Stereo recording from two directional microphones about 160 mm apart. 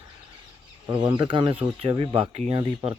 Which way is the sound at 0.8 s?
30° right (ahead or behind).